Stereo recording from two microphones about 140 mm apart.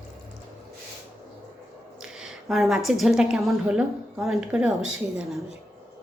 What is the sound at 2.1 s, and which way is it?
A woman's voice, centre (ahead or behind).